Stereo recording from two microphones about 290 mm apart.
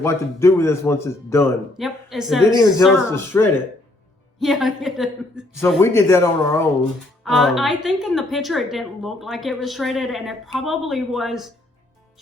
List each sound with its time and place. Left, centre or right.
0.0 s speech: centre
1.8 s a woman's voice: centre